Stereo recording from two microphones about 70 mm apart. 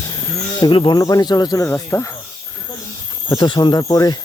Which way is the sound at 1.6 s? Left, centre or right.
Left.